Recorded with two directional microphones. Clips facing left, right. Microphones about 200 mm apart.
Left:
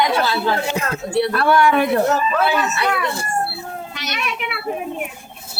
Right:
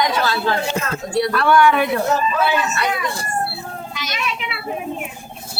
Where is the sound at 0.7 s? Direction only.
15° left (ahead or behind).